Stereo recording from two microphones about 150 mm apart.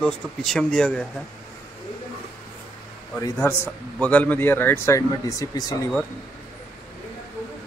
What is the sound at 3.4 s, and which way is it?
Speech, 15° left (ahead or behind).